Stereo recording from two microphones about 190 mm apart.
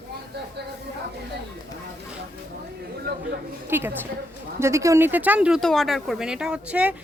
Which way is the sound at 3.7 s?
10° right (ahead or behind).